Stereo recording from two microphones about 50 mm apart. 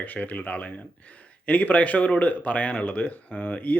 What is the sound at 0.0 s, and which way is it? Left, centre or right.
Speech, left.